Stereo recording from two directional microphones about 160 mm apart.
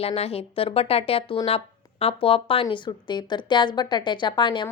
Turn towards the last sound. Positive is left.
turn(degrees=30)  # may be behind; listen again after turning